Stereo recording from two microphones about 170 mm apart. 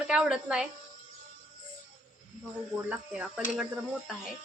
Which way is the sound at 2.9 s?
5° right (ahead or behind).